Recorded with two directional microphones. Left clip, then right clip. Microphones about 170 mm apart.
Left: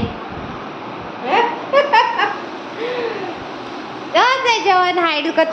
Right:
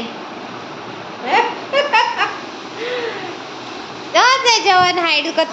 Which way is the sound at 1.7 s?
30° left (ahead or behind).